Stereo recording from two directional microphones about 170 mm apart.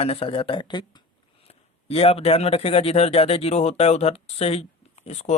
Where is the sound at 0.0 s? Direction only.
35° left (ahead or behind).